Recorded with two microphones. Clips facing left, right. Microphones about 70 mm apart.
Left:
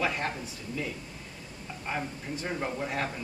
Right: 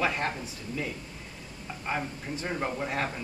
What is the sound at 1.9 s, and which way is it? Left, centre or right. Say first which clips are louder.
Speech: right 2 dB; centre.